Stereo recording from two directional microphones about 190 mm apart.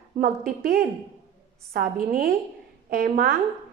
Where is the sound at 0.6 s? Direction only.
55° right (ahead or behind).